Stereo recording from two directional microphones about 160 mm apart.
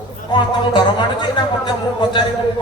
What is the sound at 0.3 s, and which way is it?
Music, 30° left (ahead or behind).